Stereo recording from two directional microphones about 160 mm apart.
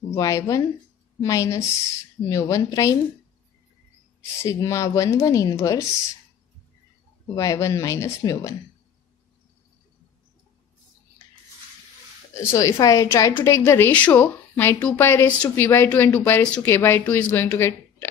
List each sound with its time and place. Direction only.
0.1 s a woman's voice: 20° left (ahead or behind)
4.2 s a woman's voice: 20° left (ahead or behind)
7.3 s a woman's voice: 20° left (ahead or behind)
12.4 s a woman's voice: 20° left (ahead or behind)